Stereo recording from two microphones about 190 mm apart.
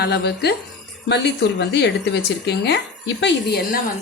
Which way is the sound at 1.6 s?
65° left (ahead or behind).